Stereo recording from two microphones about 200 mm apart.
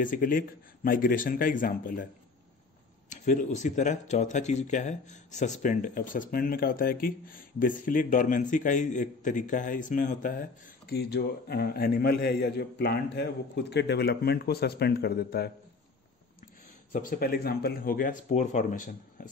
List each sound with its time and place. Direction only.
0.0 s a man's voice: 45° left (ahead or behind)
3.1 s speech: 35° left (ahead or behind)
10.9 s a man's voice: 55° left (ahead or behind)
16.9 s a man's voice: 45° left (ahead or behind)